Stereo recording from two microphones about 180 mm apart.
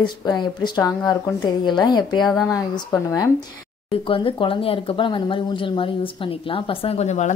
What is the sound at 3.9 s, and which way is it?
Speech, 30° left (ahead or behind).